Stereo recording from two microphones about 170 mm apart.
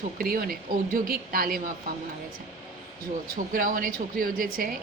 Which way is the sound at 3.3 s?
55° right (ahead or behind).